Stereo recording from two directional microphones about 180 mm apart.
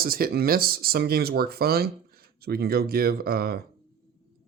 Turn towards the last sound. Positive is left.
turn(degrees=-60)  # may be behind; listen again after turning